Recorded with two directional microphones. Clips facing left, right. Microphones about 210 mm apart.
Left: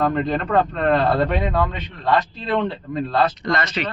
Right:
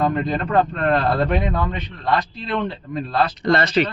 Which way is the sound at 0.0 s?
5° right (ahead or behind).